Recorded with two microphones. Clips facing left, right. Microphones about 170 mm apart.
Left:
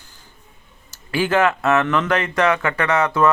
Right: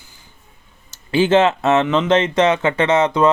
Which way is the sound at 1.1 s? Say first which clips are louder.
Right 4 dB; 20° right (ahead or behind).